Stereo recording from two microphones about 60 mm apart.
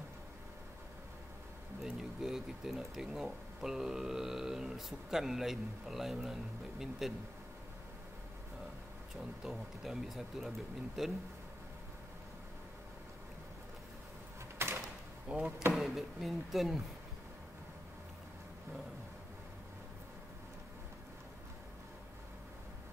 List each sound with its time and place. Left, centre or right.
1.8 s speech: centre
9.4 s speech: centre
14.6 s a sound: right
15.2 s speech: right
15.7 s speech: centre